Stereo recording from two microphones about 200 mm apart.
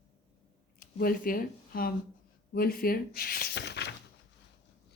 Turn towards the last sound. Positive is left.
turn(degrees=55)  # may be behind; listen again after turning